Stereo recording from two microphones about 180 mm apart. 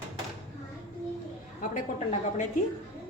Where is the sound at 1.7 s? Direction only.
45° left (ahead or behind).